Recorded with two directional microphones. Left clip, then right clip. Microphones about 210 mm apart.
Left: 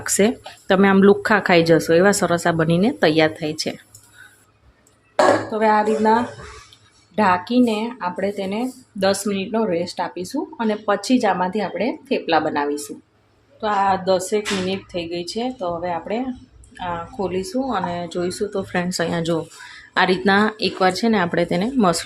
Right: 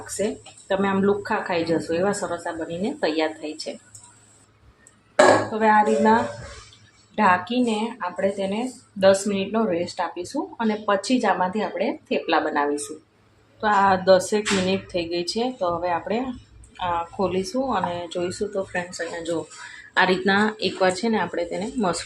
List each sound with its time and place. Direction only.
0.2 s speech: 50° left (ahead or behind)
5.5 s a woman's voice: 20° left (ahead or behind)
13.6 s a woman's voice: 5° left (ahead or behind); by 19.4 s 40° left (ahead or behind)
19.9 s a woman's voice: 20° left (ahead or behind)